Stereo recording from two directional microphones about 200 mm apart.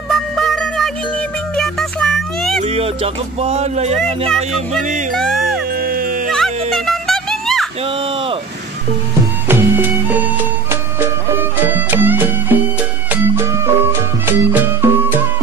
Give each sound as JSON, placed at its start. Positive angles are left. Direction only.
{"t": 0.1, "sound": "music", "side_deg": 0}
{"t": 2.6, "sound": "speech", "side_deg": -30}
{"t": 5.1, "sound": "speech", "side_deg": 0}
{"t": 5.8, "sound": "music", "side_deg": -45}
{"t": 6.7, "sound": "music", "side_deg": 0}
{"t": 9.5, "sound": "music", "side_deg": -10}
{"t": 11.3, "sound": "music", "side_deg": -10}